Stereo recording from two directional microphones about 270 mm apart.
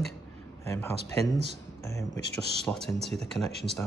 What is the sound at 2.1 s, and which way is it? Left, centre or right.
Speech, left.